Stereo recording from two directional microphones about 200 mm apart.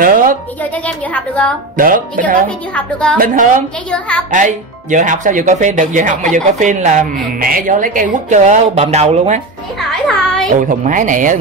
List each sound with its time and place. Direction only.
0.0 s a sound: 45° right (ahead or behind)
0.6 s a woman's voice: 5° left (ahead or behind)
1.8 s speech: 45° right (ahead or behind)
2.7 s a woman's voice: 5° left (ahead or behind)
3.2 s speech: 40° right (ahead or behind)
9.8 s a child's voice: 5° left (ahead or behind)
10.5 s speech: 40° right (ahead or behind)